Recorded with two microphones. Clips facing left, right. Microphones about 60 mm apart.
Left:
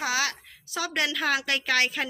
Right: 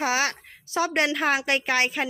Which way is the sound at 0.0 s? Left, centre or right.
Right.